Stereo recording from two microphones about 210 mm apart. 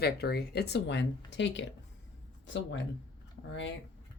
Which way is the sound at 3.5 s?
60° left (ahead or behind).